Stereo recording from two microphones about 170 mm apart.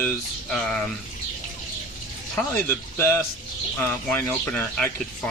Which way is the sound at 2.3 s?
10° left (ahead or behind).